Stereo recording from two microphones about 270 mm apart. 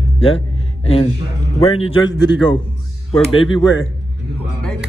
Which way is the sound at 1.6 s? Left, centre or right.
Left.